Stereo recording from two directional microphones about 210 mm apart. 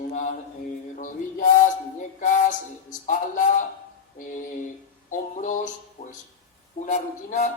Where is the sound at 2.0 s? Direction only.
35° left (ahead or behind).